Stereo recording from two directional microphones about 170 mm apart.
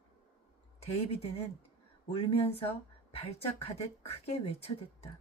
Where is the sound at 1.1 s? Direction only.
35° left (ahead or behind).